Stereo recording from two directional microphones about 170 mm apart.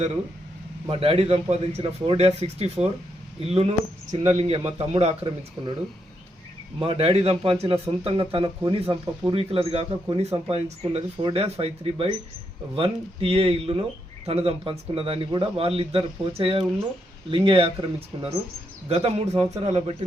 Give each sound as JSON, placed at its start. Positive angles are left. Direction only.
{"t": 0.9, "sound": "speech", "side_deg": -35}
{"t": 6.7, "sound": "speech", "side_deg": -35}